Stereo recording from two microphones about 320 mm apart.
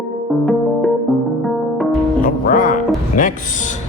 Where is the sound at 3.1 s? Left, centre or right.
Left.